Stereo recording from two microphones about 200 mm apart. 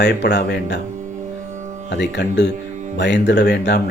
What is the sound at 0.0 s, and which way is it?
Speech, 55° left (ahead or behind).